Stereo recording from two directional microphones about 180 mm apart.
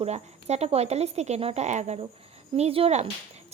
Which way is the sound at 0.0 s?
35° right (ahead or behind).